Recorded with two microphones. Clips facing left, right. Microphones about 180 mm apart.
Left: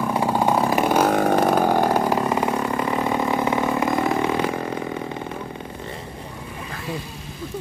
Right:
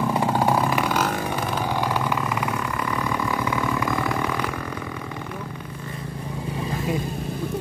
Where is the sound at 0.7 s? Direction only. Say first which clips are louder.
Left 5 dB; 45° left (ahead or behind); by 3.6 s 25° left (ahead or behind).